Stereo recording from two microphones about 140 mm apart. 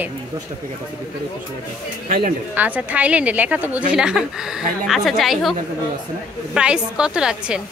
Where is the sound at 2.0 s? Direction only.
70° right (ahead or behind).